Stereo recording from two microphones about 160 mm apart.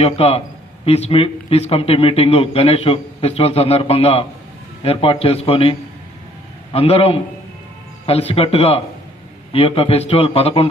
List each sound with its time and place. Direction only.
0.0 s a man's voice: 40° left (ahead or behind)